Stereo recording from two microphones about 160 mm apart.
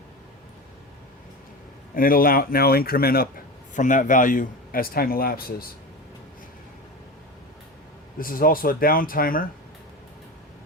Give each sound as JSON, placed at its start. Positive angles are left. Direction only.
{"t": 2.0, "sound": "a man's voice", "side_deg": 65}
{"t": 8.2, "sound": "speech", "side_deg": 60}